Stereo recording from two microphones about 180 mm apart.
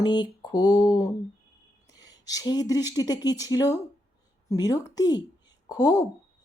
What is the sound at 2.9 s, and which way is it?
A woman's voice, 20° left (ahead or behind).